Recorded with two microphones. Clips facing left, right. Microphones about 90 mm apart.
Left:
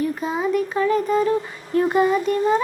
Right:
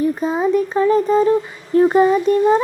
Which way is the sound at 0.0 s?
30° right (ahead or behind).